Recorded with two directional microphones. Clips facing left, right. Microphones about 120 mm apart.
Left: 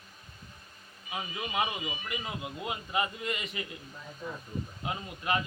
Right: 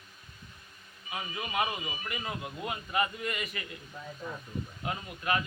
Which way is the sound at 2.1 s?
20° left (ahead or behind).